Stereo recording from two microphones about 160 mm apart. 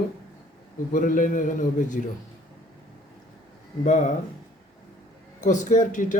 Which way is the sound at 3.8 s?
50° left (ahead or behind).